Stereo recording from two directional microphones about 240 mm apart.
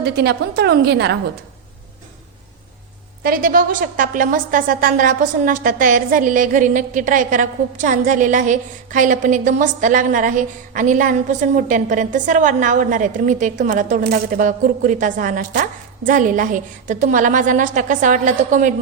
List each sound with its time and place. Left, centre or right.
0.0 s a woman's voice: right
3.2 s a woman's voice: right